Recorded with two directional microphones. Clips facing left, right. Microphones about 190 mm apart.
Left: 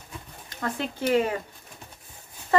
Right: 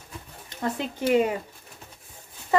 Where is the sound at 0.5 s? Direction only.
20° right (ahead or behind).